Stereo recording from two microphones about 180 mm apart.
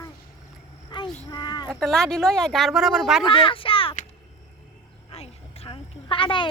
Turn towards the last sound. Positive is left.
turn(degrees=25)  # may be behind; listen again after turning